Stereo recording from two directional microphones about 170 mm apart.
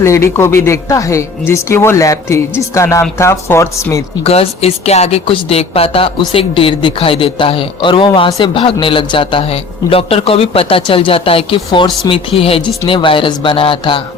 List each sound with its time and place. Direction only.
0.0 s speech: 15° left (ahead or behind)
4.2 s speech: 35° left (ahead or behind)